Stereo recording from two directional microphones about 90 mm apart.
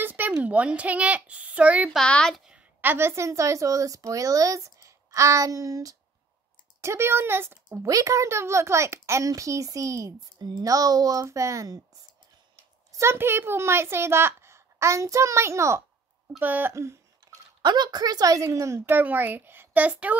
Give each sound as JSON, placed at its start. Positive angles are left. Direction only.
{"t": 0.0, "sound": "a child's voice", "side_deg": -20}
{"t": 2.0, "sound": "speech", "side_deg": 10}
{"t": 2.3, "sound": "a sound", "side_deg": -5}
{"t": 2.8, "sound": "a child's voice", "side_deg": -25}
{"t": 6.8, "sound": "speech", "side_deg": -30}
{"t": 7.8, "sound": "a child's voice", "side_deg": -40}
{"t": 12.9, "sound": "a woman's voice", "side_deg": -30}
{"t": 16.3, "sound": "a woman's voice", "side_deg": -20}
{"t": 17.2, "sound": "speech", "side_deg": -55}
{"t": 18.8, "sound": "a woman's voice", "side_deg": -20}